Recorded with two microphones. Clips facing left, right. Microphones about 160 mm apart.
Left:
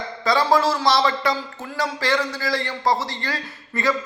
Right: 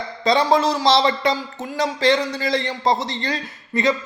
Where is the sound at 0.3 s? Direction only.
20° right (ahead or behind).